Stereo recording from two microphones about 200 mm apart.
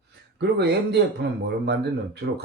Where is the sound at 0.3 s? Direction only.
55° right (ahead or behind).